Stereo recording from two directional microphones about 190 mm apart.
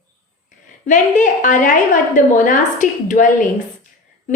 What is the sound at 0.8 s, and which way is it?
A woman's voice, 40° left (ahead or behind).